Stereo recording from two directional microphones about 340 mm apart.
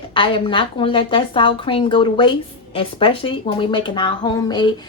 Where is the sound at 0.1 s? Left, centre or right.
Centre.